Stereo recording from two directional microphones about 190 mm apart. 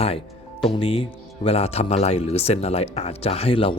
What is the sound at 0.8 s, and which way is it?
A man's voice, 30° left (ahead or behind).